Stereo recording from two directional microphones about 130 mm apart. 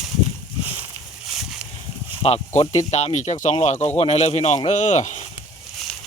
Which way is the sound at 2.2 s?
50° left (ahead or behind).